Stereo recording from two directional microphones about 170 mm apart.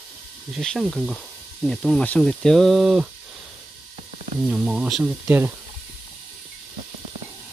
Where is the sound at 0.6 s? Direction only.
Centre (ahead or behind).